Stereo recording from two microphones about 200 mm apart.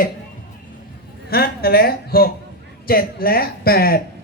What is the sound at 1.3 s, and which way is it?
A man's voice, 50° left (ahead or behind).